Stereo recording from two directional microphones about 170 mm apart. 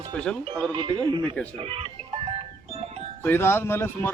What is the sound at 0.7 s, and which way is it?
Speech, 25° right (ahead or behind).